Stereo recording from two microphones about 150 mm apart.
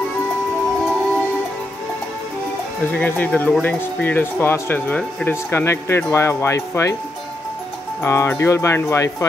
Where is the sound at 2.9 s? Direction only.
10° left (ahead or behind).